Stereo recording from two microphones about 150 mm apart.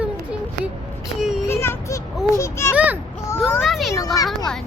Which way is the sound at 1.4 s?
15° left (ahead or behind).